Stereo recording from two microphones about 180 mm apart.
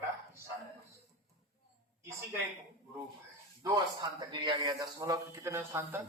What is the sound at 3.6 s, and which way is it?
A man's voice, 20° right (ahead or behind).